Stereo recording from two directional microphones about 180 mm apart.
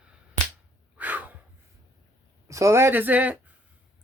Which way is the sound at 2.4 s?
15° right (ahead or behind).